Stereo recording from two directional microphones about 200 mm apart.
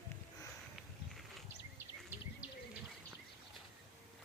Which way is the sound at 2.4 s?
5° right (ahead or behind).